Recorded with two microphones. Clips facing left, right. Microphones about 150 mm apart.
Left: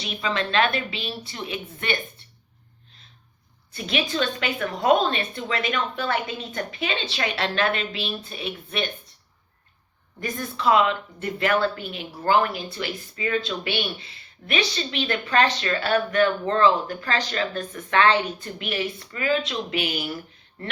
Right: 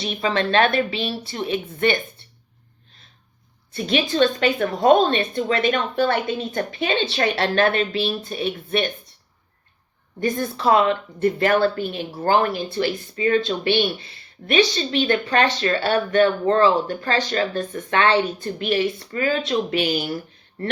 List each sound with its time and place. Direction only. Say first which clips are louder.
0.0 s speech: right 5 dB; 35° right (ahead or behind)
3.8 s speech: right 6 dB; 35° right (ahead or behind)
10.2 s speech: right 7 dB; 30° right (ahead or behind)